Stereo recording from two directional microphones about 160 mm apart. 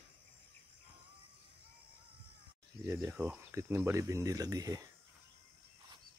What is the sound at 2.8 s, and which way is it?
Speech, 15° right (ahead or behind).